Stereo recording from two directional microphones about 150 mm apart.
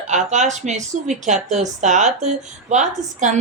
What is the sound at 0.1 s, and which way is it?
Speech, 50° right (ahead or behind).